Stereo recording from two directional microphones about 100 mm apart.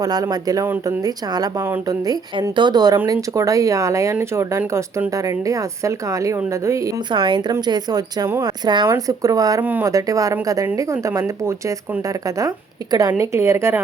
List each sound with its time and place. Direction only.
0.0 s speech: 40° right (ahead or behind)
7.1 s speech: 50° right (ahead or behind)
9.0 s speech: 35° right (ahead or behind)
12.9 s speech: 40° right (ahead or behind)